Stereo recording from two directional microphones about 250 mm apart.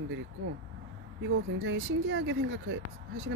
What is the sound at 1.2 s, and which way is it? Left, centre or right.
Speech, right.